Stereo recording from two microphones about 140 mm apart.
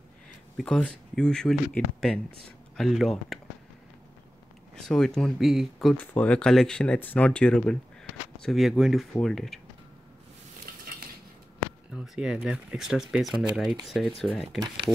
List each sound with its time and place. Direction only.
0.6 s speech: 5° left (ahead or behind)
4.8 s speech: 5° left (ahead or behind)
10.9 s cutlery: 90° right
11.9 s speech: 5° right (ahead or behind)